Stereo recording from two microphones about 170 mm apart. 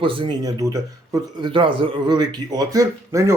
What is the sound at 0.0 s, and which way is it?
Speech, 30° right (ahead or behind).